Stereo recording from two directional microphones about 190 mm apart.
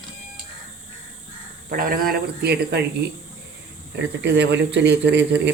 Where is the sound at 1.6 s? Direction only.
50° right (ahead or behind).